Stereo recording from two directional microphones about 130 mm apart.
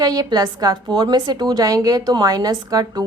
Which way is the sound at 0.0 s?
30° right (ahead or behind).